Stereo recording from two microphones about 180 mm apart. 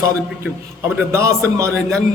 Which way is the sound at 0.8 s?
15° right (ahead or behind).